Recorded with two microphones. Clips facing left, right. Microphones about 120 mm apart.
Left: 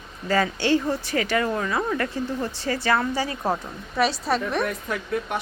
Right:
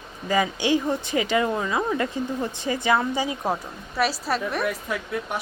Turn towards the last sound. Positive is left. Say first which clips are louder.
# left 1 dB
turn(degrees=-5)  # may be behind; listen again after turning